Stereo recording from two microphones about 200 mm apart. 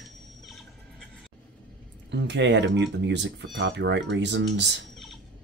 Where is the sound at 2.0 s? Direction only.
60° right (ahead or behind).